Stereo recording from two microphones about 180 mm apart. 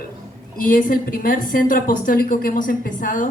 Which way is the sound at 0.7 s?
50° left (ahead or behind).